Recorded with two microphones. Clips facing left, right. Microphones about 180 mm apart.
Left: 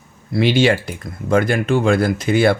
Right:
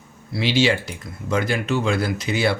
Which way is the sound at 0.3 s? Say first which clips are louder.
Left 5 dB; 55° left (ahead or behind).